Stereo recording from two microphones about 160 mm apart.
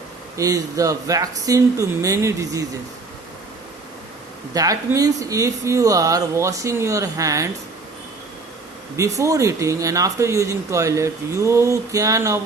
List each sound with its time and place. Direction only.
0.3 s speech: 20° right (ahead or behind)
4.5 s speech: 20° right (ahead or behind)
9.0 s speech: 20° right (ahead or behind)